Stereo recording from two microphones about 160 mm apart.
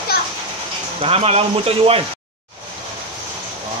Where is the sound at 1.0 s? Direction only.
40° right (ahead or behind).